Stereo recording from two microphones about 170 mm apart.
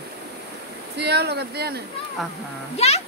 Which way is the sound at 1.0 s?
75° right (ahead or behind).